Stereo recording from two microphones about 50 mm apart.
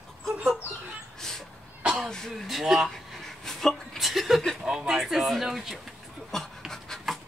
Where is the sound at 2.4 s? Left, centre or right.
Centre.